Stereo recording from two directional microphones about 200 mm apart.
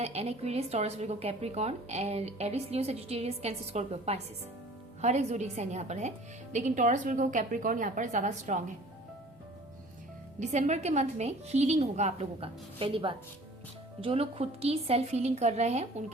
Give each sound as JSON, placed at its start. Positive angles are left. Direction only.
{"t": 0.0, "sound": "speech", "side_deg": -30}
{"t": 10.4, "sound": "speech", "side_deg": -35}